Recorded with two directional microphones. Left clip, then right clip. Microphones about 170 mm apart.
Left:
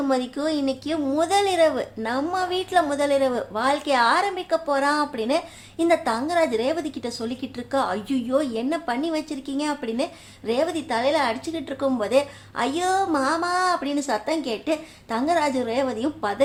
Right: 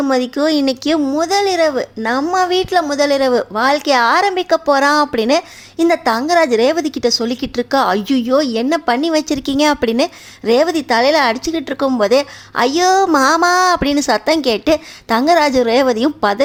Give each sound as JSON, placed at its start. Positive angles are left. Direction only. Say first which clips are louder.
{"t": 0.1, "sound": "a woman's voice", "louder": "right 10 dB", "side_deg": -35}
{"t": 1.0, "sound": "speech", "louder": "right 3 dB", "side_deg": -25}
{"t": 2.3, "sound": "a woman's voice", "louder": "right 8 dB", "side_deg": -35}